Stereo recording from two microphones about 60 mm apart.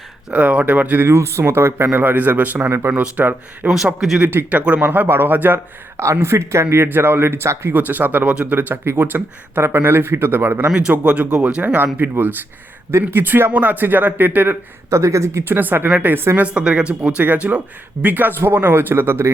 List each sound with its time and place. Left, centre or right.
0.3 s speech: right
1.0 s speech: right
1.9 s speech: right
2.6 s speech: right
2.9 s speech: centre
4.4 s speech: right
4.8 s speech: right
6.0 s speech: right
7.7 s speech: right
10.7 s speech: right
12.9 s speech: right
14.8 s speech: right
15.5 s speech: right